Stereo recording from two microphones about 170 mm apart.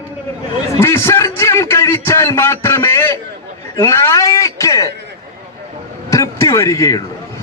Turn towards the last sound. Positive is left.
turn(degrees=20)  # may be behind; listen again after turning